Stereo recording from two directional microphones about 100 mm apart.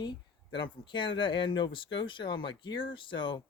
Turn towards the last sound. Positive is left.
turn(degrees=55)  # may be behind; listen again after turning